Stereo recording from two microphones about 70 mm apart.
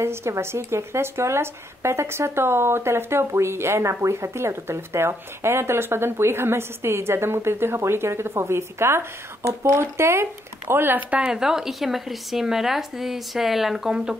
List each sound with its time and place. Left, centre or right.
0.0 s speech: right; by 14.1 s centre